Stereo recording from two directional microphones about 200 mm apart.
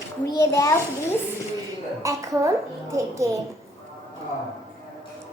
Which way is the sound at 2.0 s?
15° right (ahead or behind).